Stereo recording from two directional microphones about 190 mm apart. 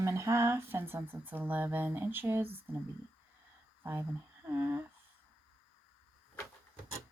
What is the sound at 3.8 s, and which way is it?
Speech, 10° right (ahead or behind).